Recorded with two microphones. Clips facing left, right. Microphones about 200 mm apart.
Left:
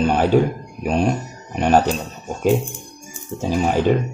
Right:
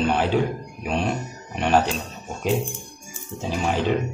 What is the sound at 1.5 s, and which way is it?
Speech, 40° left (ahead or behind).